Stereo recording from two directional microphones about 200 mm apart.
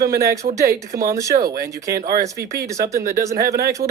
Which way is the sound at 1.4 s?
45° right (ahead or behind).